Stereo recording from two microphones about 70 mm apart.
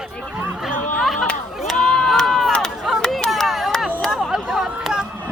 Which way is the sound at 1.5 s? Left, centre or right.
Centre.